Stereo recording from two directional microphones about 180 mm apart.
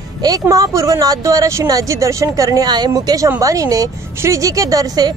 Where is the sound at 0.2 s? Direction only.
20° right (ahead or behind).